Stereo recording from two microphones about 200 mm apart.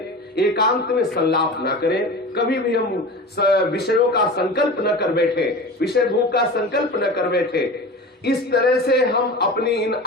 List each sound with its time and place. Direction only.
0.3 s a man's voice: 55° left (ahead or behind)